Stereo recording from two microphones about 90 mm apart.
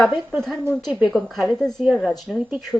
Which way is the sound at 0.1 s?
20° right (ahead or behind).